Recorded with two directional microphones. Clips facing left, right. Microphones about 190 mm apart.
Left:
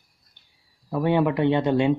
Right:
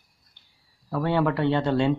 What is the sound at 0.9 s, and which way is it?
Speech, 15° left (ahead or behind).